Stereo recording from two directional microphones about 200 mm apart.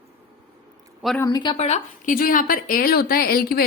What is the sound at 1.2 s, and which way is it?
Speech, 20° left (ahead or behind).